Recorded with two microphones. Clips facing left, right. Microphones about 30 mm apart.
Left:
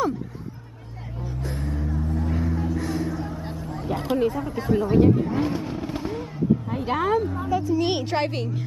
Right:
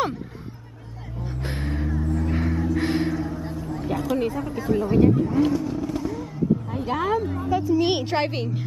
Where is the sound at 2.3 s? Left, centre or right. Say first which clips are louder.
Right 1 dB; right.